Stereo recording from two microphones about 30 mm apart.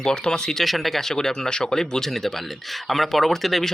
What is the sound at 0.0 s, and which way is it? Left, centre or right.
Speech, left.